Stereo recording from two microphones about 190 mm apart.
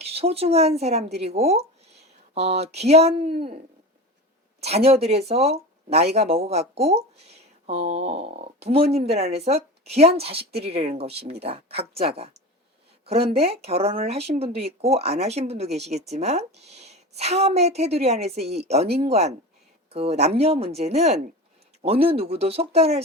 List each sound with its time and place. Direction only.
0.0 s speech: 30° right (ahead or behind)
4.9 s speech: 35° right (ahead or behind)